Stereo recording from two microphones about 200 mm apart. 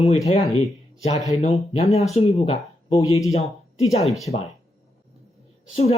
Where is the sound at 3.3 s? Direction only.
30° left (ahead or behind).